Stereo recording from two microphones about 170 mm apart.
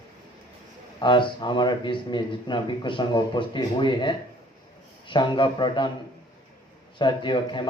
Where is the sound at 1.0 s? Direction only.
25° left (ahead or behind).